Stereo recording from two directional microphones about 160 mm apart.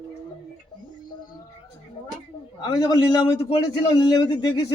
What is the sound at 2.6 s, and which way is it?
A man's voice, 25° left (ahead or behind).